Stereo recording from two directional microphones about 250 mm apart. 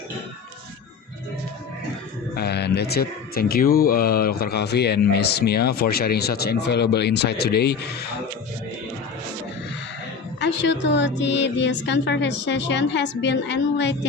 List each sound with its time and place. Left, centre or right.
2.3 s speech: left
10.4 s speech: left